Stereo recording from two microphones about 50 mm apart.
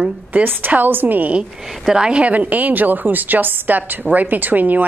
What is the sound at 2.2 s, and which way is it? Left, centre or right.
A woman's voice, right.